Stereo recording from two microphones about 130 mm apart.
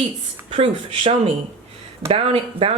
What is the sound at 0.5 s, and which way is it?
Speech, 45° right (ahead or behind).